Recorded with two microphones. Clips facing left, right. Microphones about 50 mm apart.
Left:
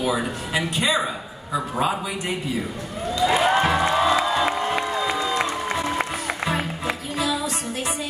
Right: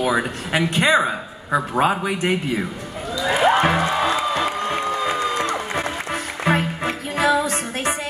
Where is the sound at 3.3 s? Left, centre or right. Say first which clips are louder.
Right 4 dB; right.